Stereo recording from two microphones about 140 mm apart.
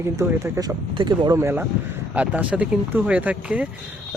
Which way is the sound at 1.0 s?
30° right (ahead or behind).